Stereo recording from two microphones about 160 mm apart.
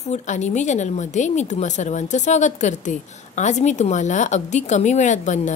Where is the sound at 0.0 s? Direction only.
45° left (ahead or behind).